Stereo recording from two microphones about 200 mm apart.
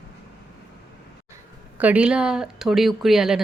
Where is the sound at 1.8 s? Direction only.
5° right (ahead or behind).